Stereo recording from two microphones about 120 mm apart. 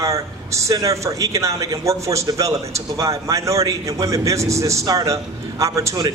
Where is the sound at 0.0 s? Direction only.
25° right (ahead or behind).